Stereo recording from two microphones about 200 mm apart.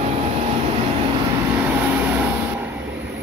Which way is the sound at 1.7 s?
10° right (ahead or behind).